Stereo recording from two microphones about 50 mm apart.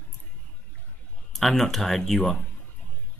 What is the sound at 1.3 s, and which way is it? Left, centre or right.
Speech, centre.